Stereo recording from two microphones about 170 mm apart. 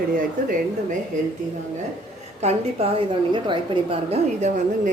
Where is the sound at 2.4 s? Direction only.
35° right (ahead or behind).